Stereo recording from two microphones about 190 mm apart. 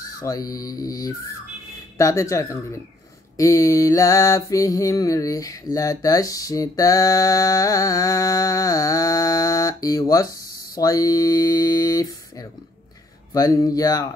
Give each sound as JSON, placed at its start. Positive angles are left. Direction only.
{"t": 0.2, "sound": "speech", "side_deg": 20}
{"t": 2.0, "sound": "mantra", "side_deg": 15}
{"t": 10.8, "sound": "speech", "side_deg": 20}